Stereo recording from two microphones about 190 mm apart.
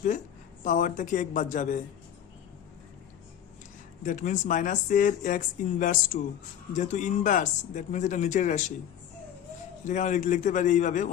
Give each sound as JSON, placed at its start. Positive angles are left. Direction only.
{"t": 0.6, "sound": "speech", "side_deg": 45}
{"t": 4.0, "sound": "speech", "side_deg": 40}
{"t": 9.8, "sound": "speech", "side_deg": 40}